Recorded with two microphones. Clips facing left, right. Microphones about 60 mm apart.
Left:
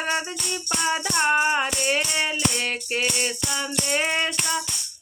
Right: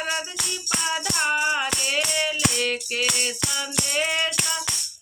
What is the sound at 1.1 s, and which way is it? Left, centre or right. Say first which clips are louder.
Music: left 3 dB; centre.